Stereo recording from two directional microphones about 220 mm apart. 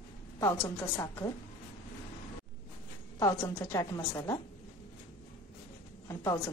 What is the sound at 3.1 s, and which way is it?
A woman's voice, 15° left (ahead or behind).